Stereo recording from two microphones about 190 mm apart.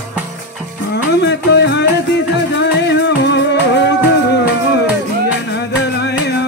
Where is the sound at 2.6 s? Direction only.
65° left (ahead or behind).